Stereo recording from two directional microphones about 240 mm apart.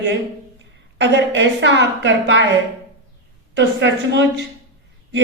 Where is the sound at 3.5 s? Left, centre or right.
Right.